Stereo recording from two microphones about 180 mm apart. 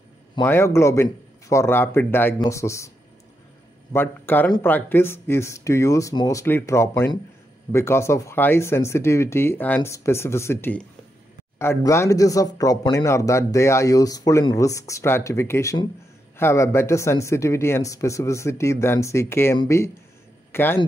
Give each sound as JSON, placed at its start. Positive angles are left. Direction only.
{"t": 0.4, "sound": "speech", "side_deg": 15}
{"t": 3.9, "sound": "speech", "side_deg": 10}